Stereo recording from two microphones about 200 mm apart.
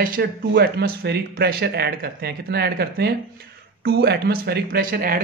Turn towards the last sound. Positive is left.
turn(degrees=-45)  # may be behind; listen again after turning